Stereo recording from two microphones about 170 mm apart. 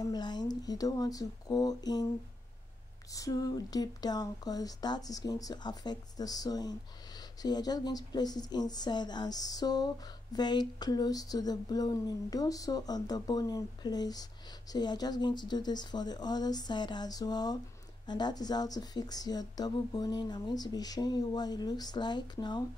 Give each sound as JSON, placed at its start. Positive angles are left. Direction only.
{"t": 0.0, "sound": "speech", "side_deg": 25}
{"t": 3.1, "sound": "speech", "side_deg": 20}